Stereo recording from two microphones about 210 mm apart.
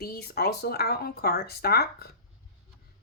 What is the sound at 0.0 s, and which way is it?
Speech, 45° left (ahead or behind).